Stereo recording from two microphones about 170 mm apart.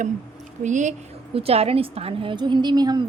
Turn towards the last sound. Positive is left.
turn(degrees=-25)  # may be behind; listen again after turning